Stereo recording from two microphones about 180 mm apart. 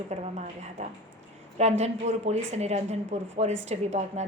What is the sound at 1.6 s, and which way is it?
A woman's voice, 40° right (ahead or behind).